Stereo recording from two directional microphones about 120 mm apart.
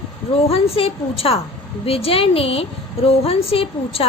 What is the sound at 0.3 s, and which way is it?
A woman's voice, 55° left (ahead or behind).